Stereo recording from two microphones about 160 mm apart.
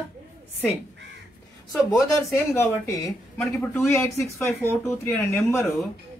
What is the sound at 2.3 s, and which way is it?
Speech, 15° left (ahead or behind).